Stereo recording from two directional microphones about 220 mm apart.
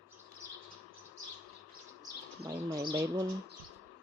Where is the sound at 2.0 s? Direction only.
15° right (ahead or behind).